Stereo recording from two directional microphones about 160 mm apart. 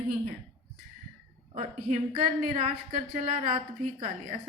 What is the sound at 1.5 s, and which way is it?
A woman's voice, 50° right (ahead or behind).